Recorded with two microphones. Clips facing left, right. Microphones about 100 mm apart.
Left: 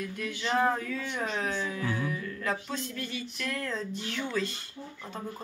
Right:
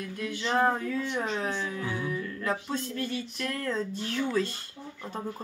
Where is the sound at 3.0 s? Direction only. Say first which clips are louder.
Right 4 dB; 35° right (ahead or behind).